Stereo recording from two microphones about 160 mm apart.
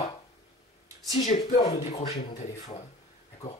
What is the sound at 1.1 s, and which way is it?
Speech, 45° left (ahead or behind).